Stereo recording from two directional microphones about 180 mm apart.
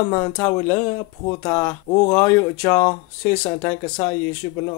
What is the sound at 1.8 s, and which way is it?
Speech, 35° left (ahead or behind).